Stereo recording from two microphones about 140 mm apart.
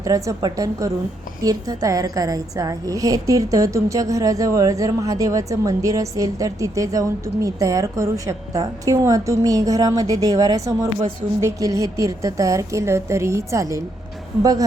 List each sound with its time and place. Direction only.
0.0 s a woman's voice: 25° right (ahead or behind)